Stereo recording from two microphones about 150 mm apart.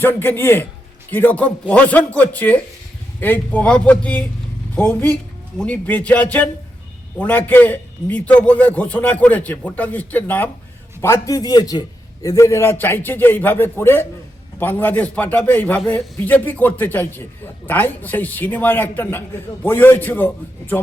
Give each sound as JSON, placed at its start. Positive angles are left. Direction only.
{"t": 0.0, "sound": "a man's voice", "side_deg": 15}